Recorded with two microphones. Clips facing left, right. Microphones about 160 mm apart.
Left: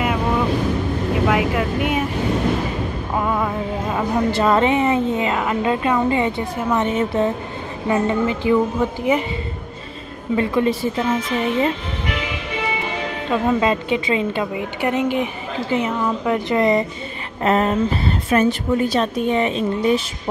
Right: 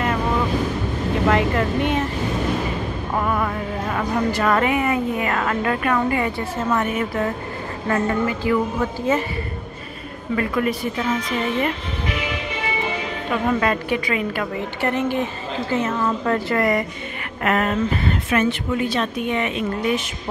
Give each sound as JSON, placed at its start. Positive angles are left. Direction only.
{"t": 1.3, "sound": "a woman's voice", "side_deg": 5}
{"t": 3.2, "sound": "a woman's voice", "side_deg": 15}
{"t": 10.3, "sound": "a woman's voice", "side_deg": 25}
{"t": 13.3, "sound": "a woman's voice", "side_deg": 20}